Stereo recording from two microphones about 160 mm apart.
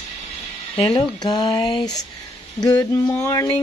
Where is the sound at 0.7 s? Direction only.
30° left (ahead or behind).